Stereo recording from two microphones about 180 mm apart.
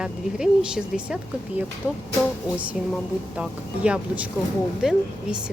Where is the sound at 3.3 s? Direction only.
5° right (ahead or behind).